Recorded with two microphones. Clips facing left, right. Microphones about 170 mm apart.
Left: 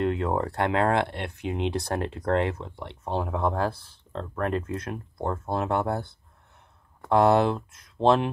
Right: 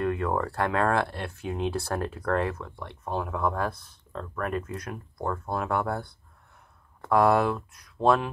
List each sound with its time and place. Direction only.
0.0 s speech: 25° left (ahead or behind)